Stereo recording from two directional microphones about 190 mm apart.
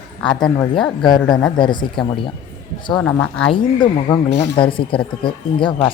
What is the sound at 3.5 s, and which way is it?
Speech, 25° left (ahead or behind).